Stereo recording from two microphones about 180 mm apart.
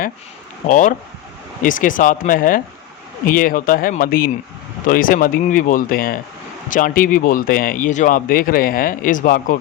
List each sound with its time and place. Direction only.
0.7 s speech: 45° left (ahead or behind)